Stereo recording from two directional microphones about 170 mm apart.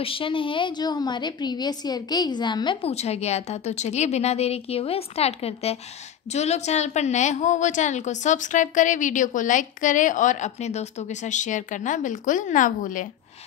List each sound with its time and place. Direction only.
0.0 s a woman's voice: 30° left (ahead or behind); by 13.1 s 50° left (ahead or behind)